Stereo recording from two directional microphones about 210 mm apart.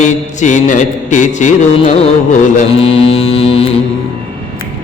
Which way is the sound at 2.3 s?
30° left (ahead or behind).